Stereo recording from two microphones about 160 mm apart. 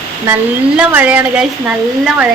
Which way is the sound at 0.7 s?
10° right (ahead or behind).